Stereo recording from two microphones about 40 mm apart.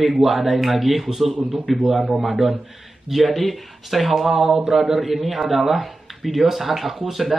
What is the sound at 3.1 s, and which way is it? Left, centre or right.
A man's voice, centre.